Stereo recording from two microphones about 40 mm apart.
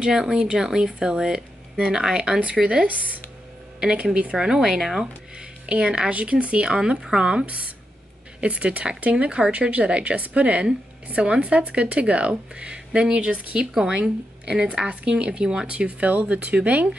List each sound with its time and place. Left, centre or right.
0.0 s speech: centre
2.6 s speech: right
4.4 s speech: centre
5.4 s speech: right
6.1 s speech: right
7.4 s speech: right